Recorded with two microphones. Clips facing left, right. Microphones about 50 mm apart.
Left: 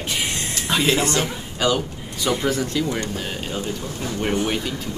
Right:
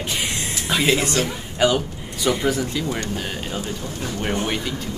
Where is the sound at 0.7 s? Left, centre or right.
Centre.